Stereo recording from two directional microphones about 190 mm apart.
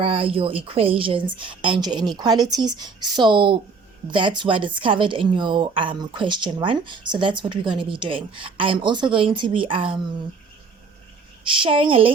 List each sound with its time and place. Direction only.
0.0 s a woman's voice: 30° right (ahead or behind)
11.4 s a woman's voice: 25° right (ahead or behind)